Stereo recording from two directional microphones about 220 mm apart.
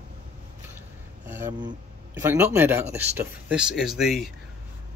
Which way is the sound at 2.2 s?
10° right (ahead or behind).